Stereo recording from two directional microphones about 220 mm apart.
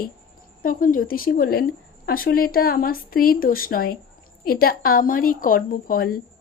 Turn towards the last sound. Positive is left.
turn(degrees=40)  # may be behind; listen again after turning